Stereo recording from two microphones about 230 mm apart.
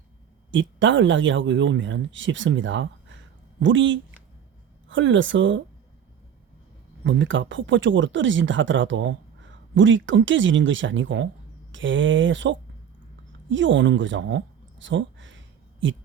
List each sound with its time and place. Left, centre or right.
0.5 s speech: right
7.0 s speech: right